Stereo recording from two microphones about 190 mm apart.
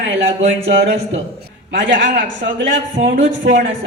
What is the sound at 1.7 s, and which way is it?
A man's voice, 55° right (ahead or behind).